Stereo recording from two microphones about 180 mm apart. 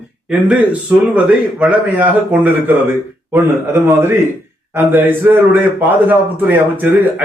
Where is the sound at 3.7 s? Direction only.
15° right (ahead or behind).